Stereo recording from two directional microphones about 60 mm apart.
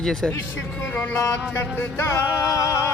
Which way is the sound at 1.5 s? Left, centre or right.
Left.